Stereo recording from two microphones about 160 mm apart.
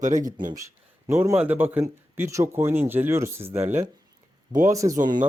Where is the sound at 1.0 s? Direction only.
15° right (ahead or behind).